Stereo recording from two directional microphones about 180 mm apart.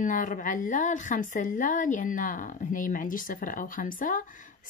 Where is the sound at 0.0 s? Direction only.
45° left (ahead or behind).